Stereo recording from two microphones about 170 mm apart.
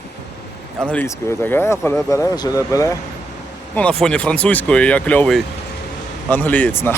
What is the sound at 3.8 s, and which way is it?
Speech, 5° left (ahead or behind).